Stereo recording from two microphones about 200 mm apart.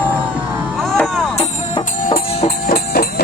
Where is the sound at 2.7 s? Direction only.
50° left (ahead or behind).